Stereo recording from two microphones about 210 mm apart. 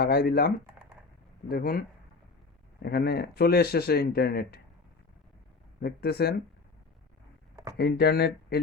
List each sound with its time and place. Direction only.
0.0 s speech: 45° left (ahead or behind)
2.8 s speech: 50° left (ahead or behind)
5.8 s speech: 50° left (ahead or behind)
7.5 s a sound: 15° right (ahead or behind)
7.8 s speech: 50° left (ahead or behind)